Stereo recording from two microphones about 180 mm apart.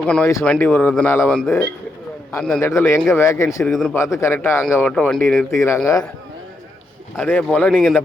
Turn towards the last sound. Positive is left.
turn(degrees=0)  # may be behind; listen again after turning